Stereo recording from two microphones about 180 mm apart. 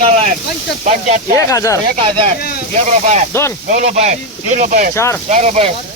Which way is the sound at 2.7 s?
40° right (ahead or behind).